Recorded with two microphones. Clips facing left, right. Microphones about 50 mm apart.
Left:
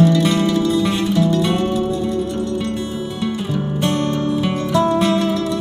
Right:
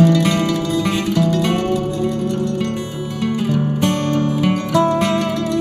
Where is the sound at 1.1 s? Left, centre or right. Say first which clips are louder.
Right 1 dB; right.